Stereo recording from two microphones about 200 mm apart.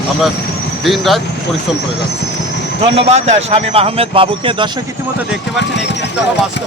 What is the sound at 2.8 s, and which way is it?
Speech, 30° right (ahead or behind).